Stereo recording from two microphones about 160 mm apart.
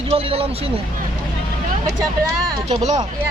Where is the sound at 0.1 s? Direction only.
35° right (ahead or behind).